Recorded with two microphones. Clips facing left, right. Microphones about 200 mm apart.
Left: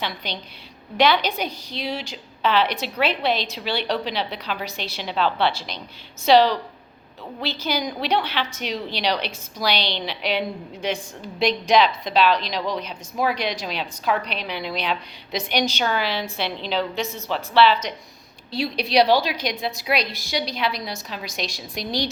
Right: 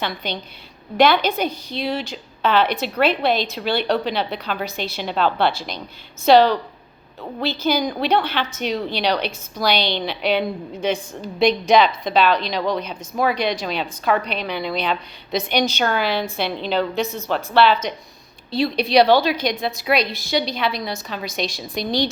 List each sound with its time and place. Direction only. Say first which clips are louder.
0.0 s a woman's voice: right 4 dB; 50° right (ahead or behind)